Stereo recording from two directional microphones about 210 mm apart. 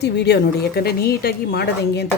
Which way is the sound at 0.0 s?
50° left (ahead or behind).